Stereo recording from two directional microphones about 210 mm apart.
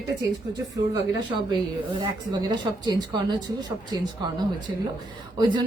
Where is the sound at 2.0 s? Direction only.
20° right (ahead or behind).